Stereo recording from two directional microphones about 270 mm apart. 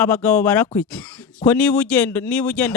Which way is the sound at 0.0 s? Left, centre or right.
Centre.